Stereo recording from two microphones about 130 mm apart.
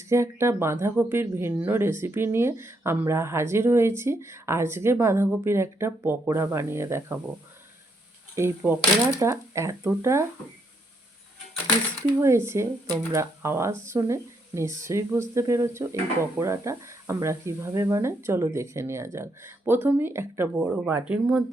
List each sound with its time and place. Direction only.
0.0 s speech: 20° right (ahead or behind)
8.4 s speech: 20° right (ahead or behind)
12.2 s speech: 20° right (ahead or behind)